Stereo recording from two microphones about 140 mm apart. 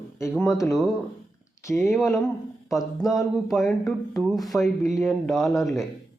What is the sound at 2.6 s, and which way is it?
Speech, centre (ahead or behind).